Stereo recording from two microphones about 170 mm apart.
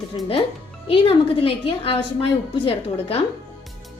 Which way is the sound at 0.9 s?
35° left (ahead or behind).